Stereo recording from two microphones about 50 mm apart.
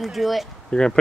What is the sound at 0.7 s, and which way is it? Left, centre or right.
Speech, centre.